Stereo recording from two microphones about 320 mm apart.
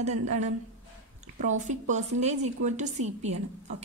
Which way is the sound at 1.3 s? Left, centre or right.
Right.